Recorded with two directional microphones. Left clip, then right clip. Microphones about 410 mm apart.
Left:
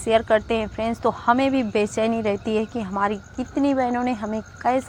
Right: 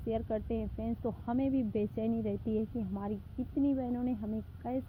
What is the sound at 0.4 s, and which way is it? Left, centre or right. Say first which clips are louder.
Speech: left 15 dB; left.